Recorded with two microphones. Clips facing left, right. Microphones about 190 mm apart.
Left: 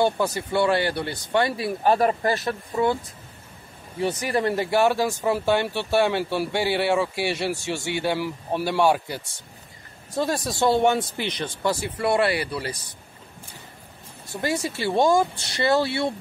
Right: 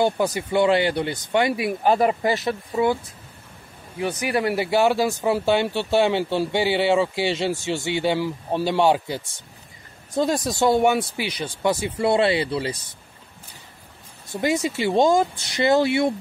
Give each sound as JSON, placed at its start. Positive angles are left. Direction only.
{"t": 0.0, "sound": "speech", "side_deg": -15}
{"t": 4.0, "sound": "speech", "side_deg": -5}
{"t": 11.6, "sound": "speech", "side_deg": -20}
{"t": 14.3, "sound": "speech", "side_deg": -15}